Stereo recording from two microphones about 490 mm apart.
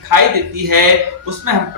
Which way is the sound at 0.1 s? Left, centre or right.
Right.